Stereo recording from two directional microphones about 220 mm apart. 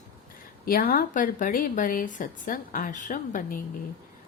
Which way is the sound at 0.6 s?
40° left (ahead or behind).